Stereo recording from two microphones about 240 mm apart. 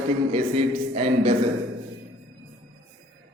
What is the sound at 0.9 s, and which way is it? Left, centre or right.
Speech, right.